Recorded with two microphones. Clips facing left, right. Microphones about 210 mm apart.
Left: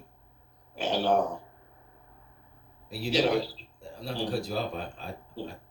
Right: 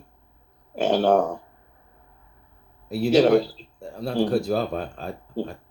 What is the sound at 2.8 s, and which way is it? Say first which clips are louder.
Speech: right 9 dB; 45° right (ahead or behind).